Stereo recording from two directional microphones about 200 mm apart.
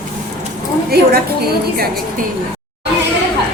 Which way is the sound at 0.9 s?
50° right (ahead or behind).